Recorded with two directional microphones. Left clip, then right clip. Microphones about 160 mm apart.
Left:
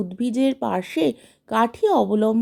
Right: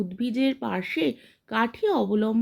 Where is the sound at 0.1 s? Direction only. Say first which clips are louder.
Left 6 dB; 40° left (ahead or behind).